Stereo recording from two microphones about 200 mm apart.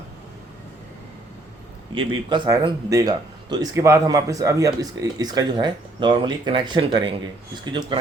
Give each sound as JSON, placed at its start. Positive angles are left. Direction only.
{"t": 2.0, "sound": "speech", "side_deg": -20}